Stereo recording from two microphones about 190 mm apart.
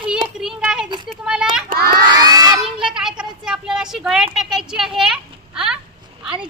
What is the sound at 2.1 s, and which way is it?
Crowd, 20° right (ahead or behind).